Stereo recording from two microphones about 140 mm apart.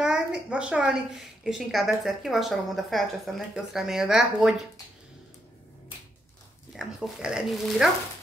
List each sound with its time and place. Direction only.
0.0 s a woman's voice: 5° right (ahead or behind)
6.7 s a woman's voice: centre (ahead or behind)